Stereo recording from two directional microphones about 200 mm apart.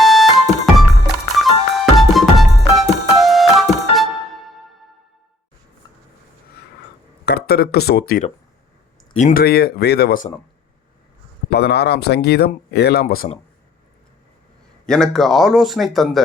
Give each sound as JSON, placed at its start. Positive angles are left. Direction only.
{"t": 0.0, "sound": "music", "side_deg": 0}
{"t": 7.3, "sound": "speech", "side_deg": 50}
{"t": 11.5, "sound": "speech", "side_deg": 55}
{"t": 14.8, "sound": "speech", "side_deg": 5}